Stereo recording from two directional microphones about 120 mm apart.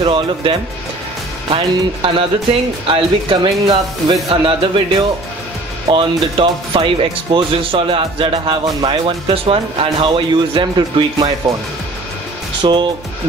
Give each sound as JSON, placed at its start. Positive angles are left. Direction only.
{"t": 0.0, "sound": "speech", "side_deg": -45}
{"t": 12.6, "sound": "speech", "side_deg": -40}